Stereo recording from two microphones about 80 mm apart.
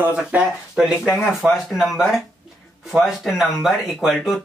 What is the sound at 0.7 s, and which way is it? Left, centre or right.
Speech, centre.